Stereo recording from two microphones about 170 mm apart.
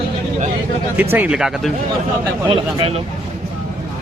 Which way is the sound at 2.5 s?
30° right (ahead or behind).